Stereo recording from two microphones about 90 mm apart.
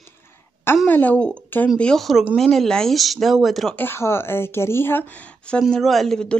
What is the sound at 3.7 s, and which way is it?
Speech, 25° left (ahead or behind).